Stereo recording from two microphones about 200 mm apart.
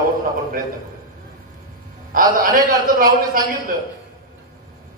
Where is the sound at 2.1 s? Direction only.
45° right (ahead or behind).